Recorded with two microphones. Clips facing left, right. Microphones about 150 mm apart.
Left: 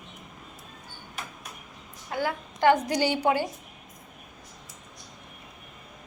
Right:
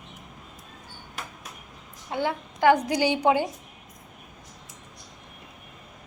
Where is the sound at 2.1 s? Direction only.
25° right (ahead or behind).